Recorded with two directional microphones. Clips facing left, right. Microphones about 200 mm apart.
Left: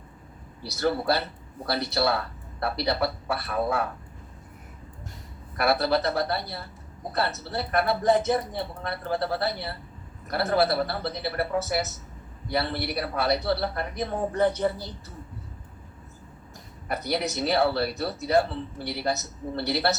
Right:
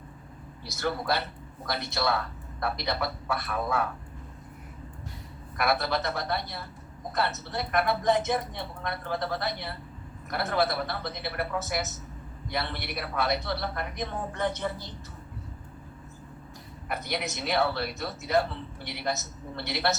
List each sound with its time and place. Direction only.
0.8 s speech: 35° left (ahead or behind)
5.5 s speech: 35° left (ahead or behind)
16.9 s speech: 35° left (ahead or behind)